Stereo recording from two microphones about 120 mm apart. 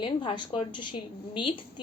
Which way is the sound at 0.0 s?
40° left (ahead or behind).